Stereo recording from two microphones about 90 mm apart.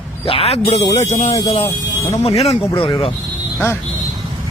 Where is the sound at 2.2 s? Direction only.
90° left.